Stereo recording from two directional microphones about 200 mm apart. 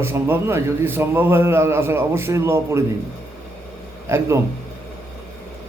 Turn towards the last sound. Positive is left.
turn(degrees=-15)  # may be behind; listen again after turning